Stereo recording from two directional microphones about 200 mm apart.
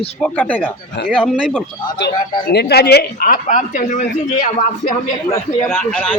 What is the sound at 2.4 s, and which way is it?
Speech, 55° left (ahead or behind).